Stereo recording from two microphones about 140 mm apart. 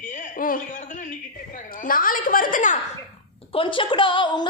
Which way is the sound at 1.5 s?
75° left (ahead or behind).